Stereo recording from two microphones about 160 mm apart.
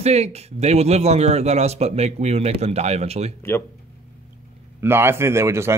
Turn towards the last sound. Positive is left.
turn(degrees=-15)  # may be behind; listen again after turning